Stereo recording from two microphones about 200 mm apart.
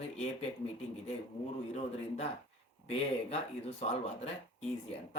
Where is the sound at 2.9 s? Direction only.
30° left (ahead or behind).